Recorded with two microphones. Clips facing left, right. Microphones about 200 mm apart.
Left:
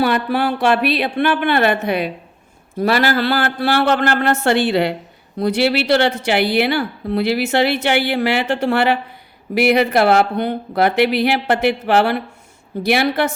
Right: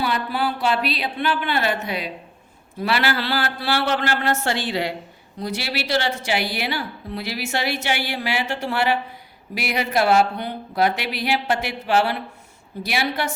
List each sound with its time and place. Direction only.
0.0 s a woman's voice: 60° left (ahead or behind)
2.7 s a woman's voice: 45° left (ahead or behind); by 13.2 s 60° left (ahead or behind)